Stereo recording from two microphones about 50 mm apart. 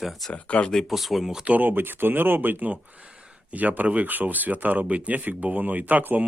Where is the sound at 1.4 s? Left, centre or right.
Right.